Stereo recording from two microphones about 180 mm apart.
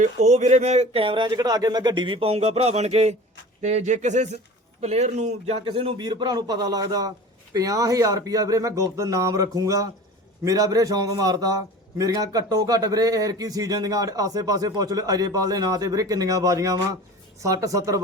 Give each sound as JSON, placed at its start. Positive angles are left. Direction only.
{"t": 0.0, "sound": "a man's voice", "side_deg": -40}